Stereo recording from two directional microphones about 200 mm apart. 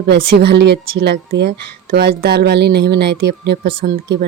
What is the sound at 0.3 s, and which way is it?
Speech, 55° right (ahead or behind).